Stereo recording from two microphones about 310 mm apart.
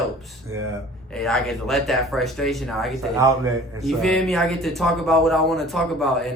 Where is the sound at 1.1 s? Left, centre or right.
Centre.